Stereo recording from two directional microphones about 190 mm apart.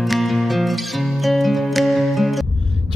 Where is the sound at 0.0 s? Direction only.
Centre (ahead or behind).